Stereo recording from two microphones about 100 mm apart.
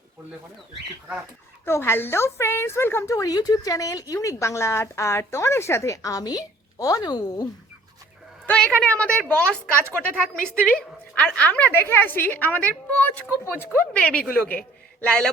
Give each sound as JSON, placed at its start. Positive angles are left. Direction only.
{"t": 1.6, "sound": "a woman's voice", "side_deg": 25}
{"t": 8.4, "sound": "a woman's voice", "side_deg": 10}
{"t": 13.9, "sound": "a woman's voice", "side_deg": 15}